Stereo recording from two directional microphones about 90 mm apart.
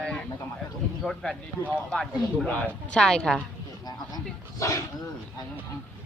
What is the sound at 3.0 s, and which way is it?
Speech, 5° left (ahead or behind).